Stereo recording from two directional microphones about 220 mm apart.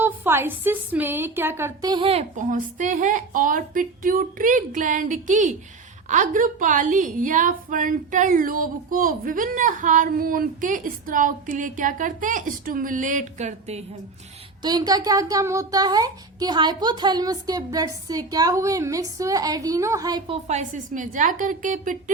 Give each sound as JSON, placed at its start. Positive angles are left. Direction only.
{"t": 0.0, "sound": "a woman's voice", "side_deg": -10}
{"t": 14.6, "sound": "a child's voice", "side_deg": -15}